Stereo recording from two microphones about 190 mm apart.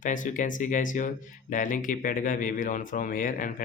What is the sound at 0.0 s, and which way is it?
Speech, 45° left (ahead or behind).